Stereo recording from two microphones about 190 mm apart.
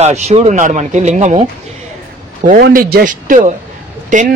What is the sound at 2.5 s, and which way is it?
A man's voice, 50° right (ahead or behind).